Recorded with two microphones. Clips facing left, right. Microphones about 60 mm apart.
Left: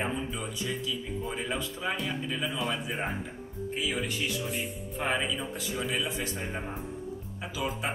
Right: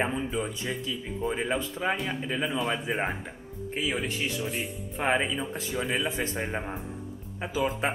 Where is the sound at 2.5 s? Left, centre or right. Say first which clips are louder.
Right 3 dB; centre.